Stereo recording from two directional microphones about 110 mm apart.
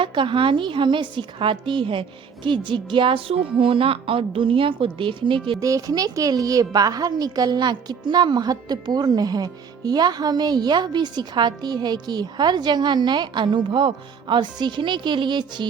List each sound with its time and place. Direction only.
0.0 s a woman's voice: 50° right (ahead or behind)
5.5 s a woman's voice: 30° right (ahead or behind)